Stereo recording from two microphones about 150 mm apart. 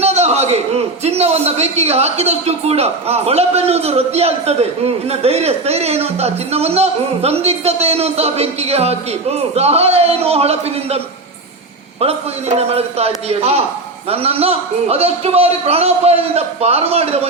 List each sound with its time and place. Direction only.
0.0 s a man's voice: 45° right (ahead or behind)